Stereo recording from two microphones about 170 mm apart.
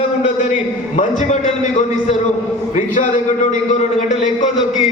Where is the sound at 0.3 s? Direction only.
45° left (ahead or behind).